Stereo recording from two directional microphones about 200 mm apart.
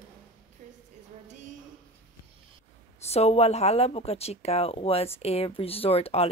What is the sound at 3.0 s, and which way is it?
Speech, 30° left (ahead or behind).